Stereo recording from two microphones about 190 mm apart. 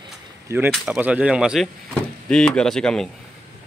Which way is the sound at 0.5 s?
10° right (ahead or behind).